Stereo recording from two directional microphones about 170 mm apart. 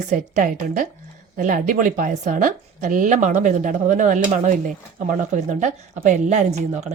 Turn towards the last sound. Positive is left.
turn(degrees=-40)  # may be behind; listen again after turning